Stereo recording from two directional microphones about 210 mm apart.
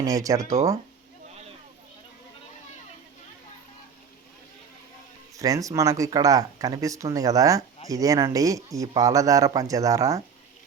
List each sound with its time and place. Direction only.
0.0 s speech: 15° right (ahead or behind)
5.4 s speech: 15° right (ahead or behind)